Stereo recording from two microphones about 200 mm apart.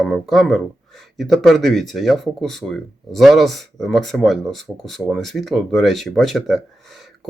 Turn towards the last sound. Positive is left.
turn(degrees=0)  # may be behind; listen again after turning